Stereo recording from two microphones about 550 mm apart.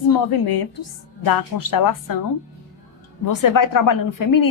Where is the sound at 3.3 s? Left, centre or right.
Left.